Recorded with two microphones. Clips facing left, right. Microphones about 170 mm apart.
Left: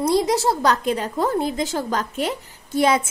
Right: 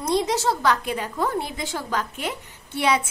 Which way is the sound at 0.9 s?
45° left (ahead or behind).